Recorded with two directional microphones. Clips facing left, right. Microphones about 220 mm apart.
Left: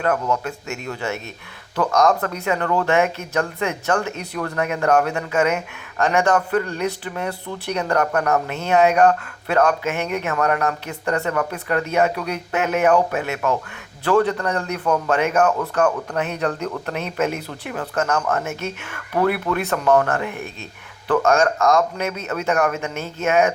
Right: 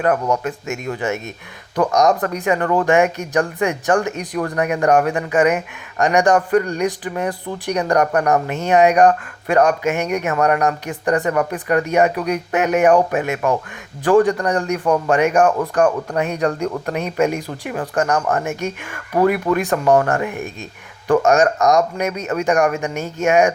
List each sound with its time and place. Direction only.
0.0 s a man's voice: 15° right (ahead or behind)